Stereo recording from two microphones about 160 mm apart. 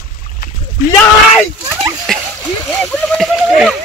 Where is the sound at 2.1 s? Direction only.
5° left (ahead or behind).